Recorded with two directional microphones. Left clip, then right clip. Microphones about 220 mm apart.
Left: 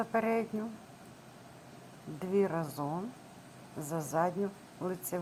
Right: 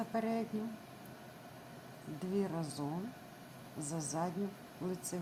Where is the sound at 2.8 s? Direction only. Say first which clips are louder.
Left 5 dB; 20° left (ahead or behind).